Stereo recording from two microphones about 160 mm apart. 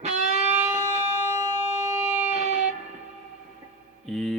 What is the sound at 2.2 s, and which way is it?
Music, 45° right (ahead or behind).